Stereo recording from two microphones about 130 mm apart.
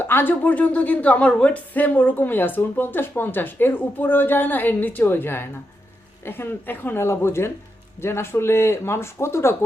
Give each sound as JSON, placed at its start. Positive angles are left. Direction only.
{"t": 0.0, "sound": "a woman's voice", "side_deg": 15}